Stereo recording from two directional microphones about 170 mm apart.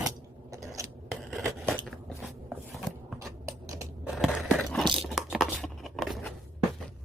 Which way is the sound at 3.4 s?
15° right (ahead or behind).